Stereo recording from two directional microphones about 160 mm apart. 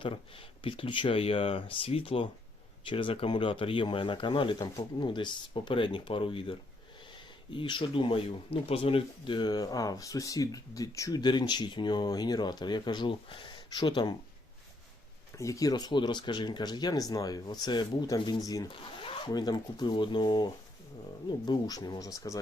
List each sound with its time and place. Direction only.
0.0 s speech: 35° left (ahead or behind)
15.4 s speech: 20° left (ahead or behind)